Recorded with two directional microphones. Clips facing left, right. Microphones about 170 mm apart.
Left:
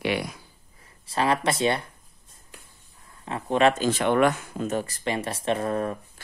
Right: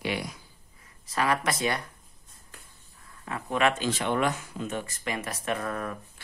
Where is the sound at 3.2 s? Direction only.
30° left (ahead or behind).